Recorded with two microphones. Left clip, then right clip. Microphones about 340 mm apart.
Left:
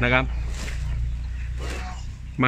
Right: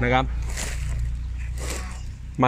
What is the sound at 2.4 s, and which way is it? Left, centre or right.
Speech, centre.